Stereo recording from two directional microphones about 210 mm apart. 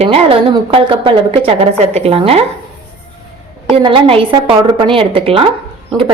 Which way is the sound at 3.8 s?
25° right (ahead or behind).